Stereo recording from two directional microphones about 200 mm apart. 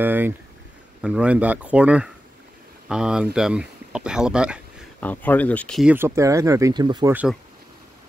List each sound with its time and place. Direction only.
0.0 s speech: 10° right (ahead or behind)
5.0 s speech: 10° left (ahead or behind)
5.9 s speech: 15° right (ahead or behind)